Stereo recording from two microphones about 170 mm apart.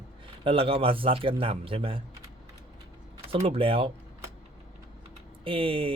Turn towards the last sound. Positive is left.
turn(degrees=-30)  # may be behind; listen again after turning